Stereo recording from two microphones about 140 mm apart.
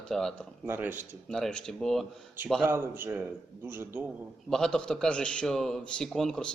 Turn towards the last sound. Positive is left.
turn(degrees=5)  # may be behind; listen again after turning